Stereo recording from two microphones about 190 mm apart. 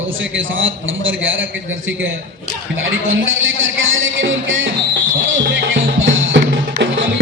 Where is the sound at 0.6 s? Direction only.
90° right.